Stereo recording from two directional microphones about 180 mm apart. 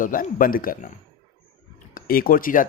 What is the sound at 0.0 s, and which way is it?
Speech, 50° left (ahead or behind).